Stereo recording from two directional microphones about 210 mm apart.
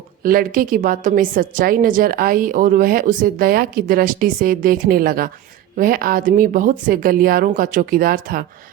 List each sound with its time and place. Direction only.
0.2 s a woman's voice: 40° right (ahead or behind)